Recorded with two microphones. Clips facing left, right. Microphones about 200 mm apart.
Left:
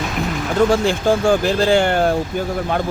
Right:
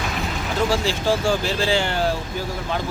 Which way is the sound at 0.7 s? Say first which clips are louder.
Left 5 dB; 55° left (ahead or behind).